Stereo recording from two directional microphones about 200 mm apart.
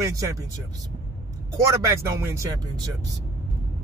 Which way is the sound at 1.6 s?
15° right (ahead or behind).